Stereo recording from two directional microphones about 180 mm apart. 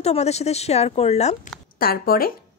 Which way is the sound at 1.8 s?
55° left (ahead or behind).